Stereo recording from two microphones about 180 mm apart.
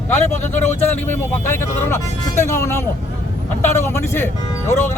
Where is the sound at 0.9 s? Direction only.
10° left (ahead or behind).